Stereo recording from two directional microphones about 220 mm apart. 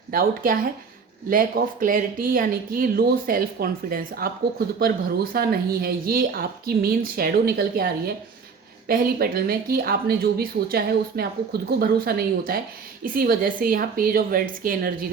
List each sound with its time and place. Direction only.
0.1 s speech: 40° right (ahead or behind)